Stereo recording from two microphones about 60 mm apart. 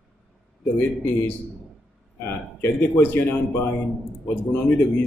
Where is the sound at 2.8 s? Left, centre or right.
Left.